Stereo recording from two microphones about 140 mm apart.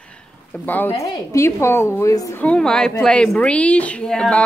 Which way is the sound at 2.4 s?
5° left (ahead or behind).